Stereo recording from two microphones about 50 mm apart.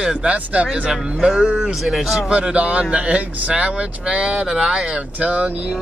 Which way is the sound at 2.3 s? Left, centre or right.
Right.